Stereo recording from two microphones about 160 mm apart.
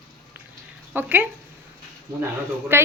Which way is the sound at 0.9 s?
10° right (ahead or behind).